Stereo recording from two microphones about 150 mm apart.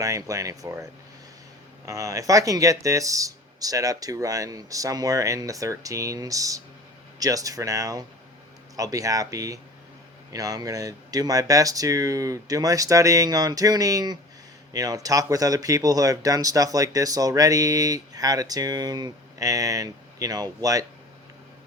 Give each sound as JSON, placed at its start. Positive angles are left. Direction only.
{"t": 0.0, "sound": "speech", "side_deg": -20}